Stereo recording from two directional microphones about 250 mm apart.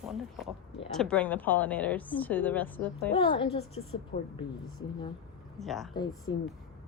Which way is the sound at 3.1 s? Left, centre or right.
Left.